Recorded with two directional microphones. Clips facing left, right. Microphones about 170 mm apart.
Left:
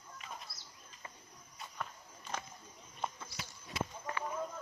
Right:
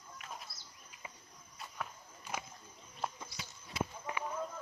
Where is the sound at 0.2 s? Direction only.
5° right (ahead or behind).